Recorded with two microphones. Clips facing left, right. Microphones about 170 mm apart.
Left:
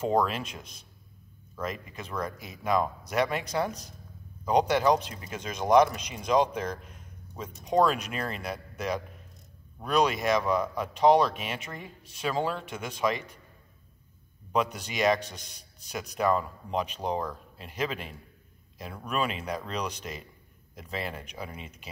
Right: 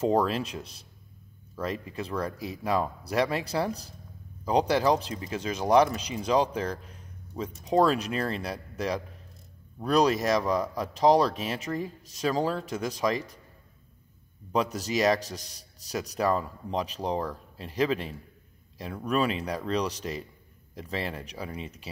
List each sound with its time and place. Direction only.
0.0 s speech: 35° right (ahead or behind)
14.5 s speech: 35° right (ahead or behind)